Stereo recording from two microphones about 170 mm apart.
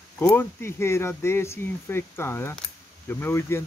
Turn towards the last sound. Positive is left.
turn(degrees=15)  # may be behind; listen again after turning